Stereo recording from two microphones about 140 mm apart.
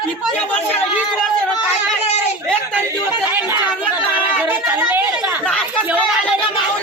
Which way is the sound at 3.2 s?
15° right (ahead or behind).